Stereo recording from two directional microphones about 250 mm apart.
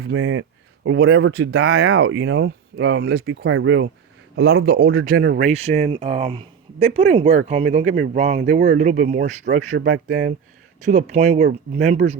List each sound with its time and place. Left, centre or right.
0.0 s a man's voice: right
4.6 s speech: right